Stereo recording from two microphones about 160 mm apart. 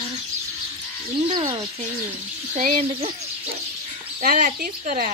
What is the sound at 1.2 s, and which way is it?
Speech, 35° right (ahead or behind).